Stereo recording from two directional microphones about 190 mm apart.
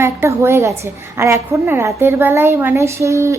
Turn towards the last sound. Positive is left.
turn(degrees=-15)  # may be behind; listen again after turning